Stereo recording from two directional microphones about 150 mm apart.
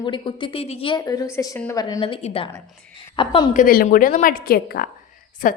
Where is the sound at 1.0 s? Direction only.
25° left (ahead or behind).